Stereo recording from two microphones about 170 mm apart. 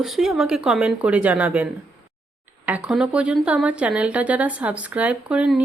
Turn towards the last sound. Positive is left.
turn(degrees=-5)  # may be behind; listen again after turning